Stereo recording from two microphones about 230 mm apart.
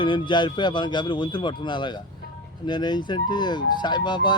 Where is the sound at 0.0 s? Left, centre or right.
Centre.